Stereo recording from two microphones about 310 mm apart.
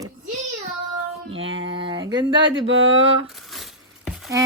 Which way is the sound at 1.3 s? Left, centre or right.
Right.